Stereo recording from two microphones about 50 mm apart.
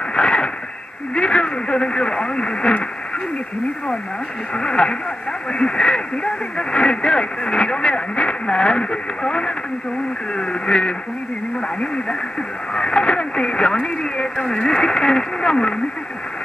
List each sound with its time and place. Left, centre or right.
0.1 s a sound: centre
1.1 s radio: left
4.6 s speech: centre
12.7 s speech: centre